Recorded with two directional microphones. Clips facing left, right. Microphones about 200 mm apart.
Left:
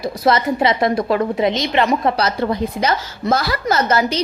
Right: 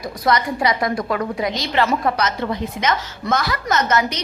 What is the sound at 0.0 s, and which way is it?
A woman's voice, 25° left (ahead or behind).